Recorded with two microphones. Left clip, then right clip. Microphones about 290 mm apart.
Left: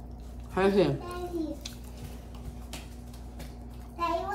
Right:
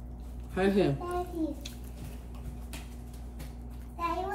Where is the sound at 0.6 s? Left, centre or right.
Left.